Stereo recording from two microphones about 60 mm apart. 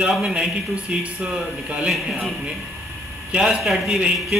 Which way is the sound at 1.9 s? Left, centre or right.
Centre.